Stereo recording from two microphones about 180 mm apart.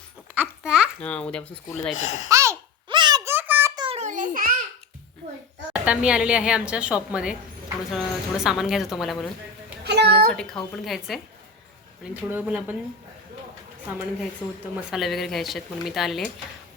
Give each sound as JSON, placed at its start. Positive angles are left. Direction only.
{"t": 0.3, "sound": "babbling", "side_deg": -5}
{"t": 1.0, "sound": "speech", "side_deg": 5}
{"t": 2.0, "sound": "speech", "side_deg": 40}
{"t": 2.3, "sound": "a sound", "side_deg": -15}
{"t": 3.8, "sound": "a sound", "side_deg": -35}
{"t": 5.7, "sound": "speech", "side_deg": -5}
{"t": 9.8, "sound": "a sound", "side_deg": -65}
{"t": 10.3, "sound": "speech", "side_deg": 0}
{"t": 14.8, "sound": "speech", "side_deg": 0}